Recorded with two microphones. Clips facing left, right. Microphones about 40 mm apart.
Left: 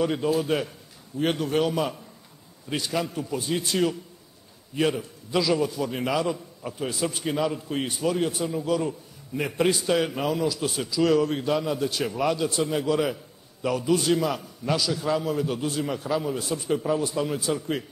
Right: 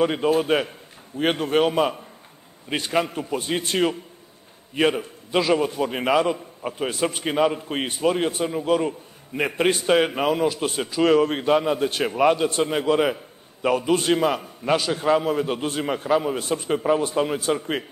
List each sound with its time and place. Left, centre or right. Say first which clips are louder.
0.0 s a man's voice: right 4 dB; right